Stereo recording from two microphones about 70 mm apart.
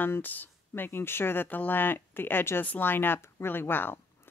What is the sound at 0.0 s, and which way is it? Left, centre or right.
Speech, left.